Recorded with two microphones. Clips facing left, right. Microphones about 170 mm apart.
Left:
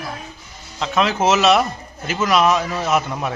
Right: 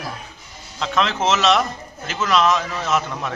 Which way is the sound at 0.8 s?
10° left (ahead or behind).